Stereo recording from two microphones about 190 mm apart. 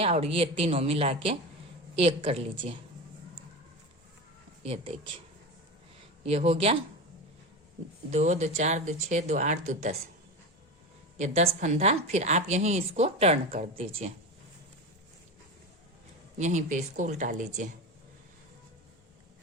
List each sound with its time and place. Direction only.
0.0 s a woman's voice: 30° right (ahead or behind)
4.6 s speech: 30° right (ahead or behind)
6.2 s a woman's voice: 30° right (ahead or behind)
8.1 s a woman's voice: 40° right (ahead or behind)
11.6 s a woman's voice: 35° right (ahead or behind)
16.4 s a woman's voice: 40° right (ahead or behind)